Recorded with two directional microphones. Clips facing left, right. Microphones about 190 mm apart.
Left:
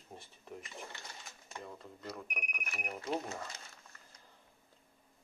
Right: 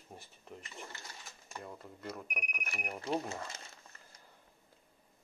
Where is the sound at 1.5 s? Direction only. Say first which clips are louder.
Right 1 dB; 5° right (ahead or behind).